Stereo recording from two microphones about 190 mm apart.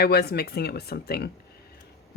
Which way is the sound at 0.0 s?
55° left (ahead or behind).